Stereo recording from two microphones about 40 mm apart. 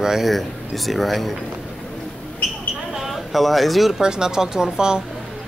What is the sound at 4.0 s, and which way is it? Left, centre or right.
Speech, centre.